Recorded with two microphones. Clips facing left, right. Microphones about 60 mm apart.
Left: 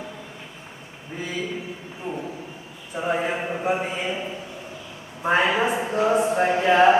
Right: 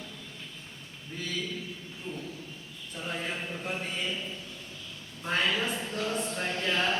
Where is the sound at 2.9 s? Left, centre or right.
Left.